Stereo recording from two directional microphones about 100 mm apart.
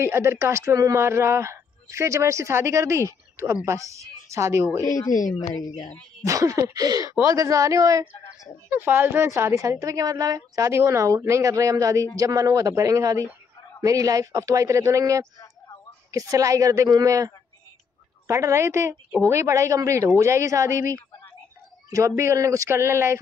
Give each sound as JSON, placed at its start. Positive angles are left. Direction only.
{"t": 0.0, "sound": "a woman's voice", "side_deg": -25}
{"t": 4.8, "sound": "speech", "side_deg": 35}
{"t": 5.6, "sound": "speech", "side_deg": 50}
{"t": 6.2, "sound": "a woman's voice", "side_deg": -35}
{"t": 8.6, "sound": "a woman's voice", "side_deg": -20}